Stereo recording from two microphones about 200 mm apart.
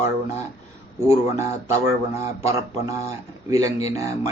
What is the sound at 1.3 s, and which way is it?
Speech, 15° right (ahead or behind).